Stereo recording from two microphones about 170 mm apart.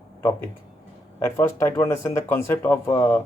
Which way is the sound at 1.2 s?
15° left (ahead or behind).